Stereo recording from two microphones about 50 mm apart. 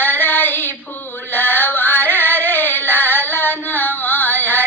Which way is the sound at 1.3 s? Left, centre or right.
Left.